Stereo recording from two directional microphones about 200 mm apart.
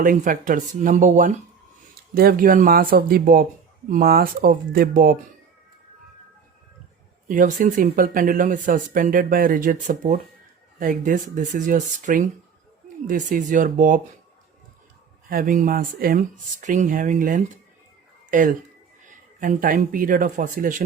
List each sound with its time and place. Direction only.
0.0 s speech: 45° right (ahead or behind)
7.3 s speech: 40° right (ahead or behind)
15.3 s speech: 45° right (ahead or behind)